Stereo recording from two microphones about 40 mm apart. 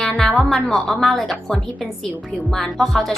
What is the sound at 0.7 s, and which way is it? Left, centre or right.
Speech, centre.